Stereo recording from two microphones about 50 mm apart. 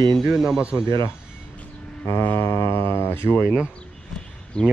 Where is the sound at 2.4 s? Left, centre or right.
Left.